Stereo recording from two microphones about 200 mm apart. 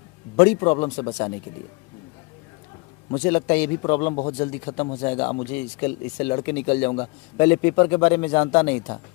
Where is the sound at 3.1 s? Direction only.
20° left (ahead or behind).